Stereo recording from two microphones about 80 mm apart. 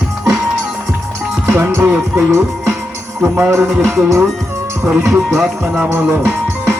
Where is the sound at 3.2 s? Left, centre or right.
Right.